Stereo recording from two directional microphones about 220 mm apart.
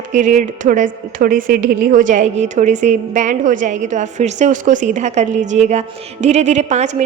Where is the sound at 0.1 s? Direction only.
35° right (ahead or behind).